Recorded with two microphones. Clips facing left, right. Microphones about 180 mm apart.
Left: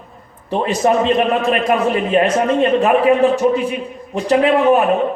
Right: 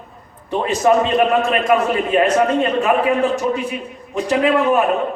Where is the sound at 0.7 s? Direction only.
35° left (ahead or behind).